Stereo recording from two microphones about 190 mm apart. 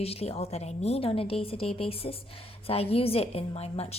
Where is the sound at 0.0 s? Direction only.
30° left (ahead or behind).